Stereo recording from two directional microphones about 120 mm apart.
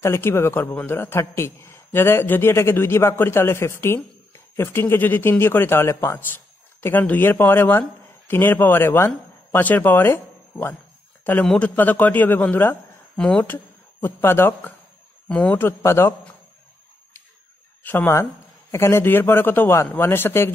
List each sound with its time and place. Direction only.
0.0 s a man's voice: 20° left (ahead or behind)
11.4 s a man's voice: 10° left (ahead or behind)
14.0 s a man's voice: 20° left (ahead or behind)
17.8 s a man's voice: 15° left (ahead or behind)